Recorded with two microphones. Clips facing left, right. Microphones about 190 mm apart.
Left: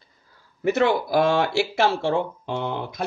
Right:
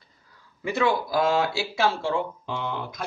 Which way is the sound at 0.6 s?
65° left (ahead or behind).